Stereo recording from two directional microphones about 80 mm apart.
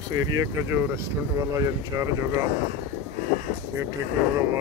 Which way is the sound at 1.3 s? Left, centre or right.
Right.